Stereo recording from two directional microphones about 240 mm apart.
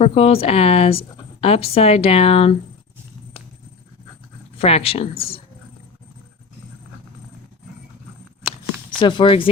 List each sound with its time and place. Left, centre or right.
0.0 s speech: left
4.5 s speech: left
9.0 s speech: centre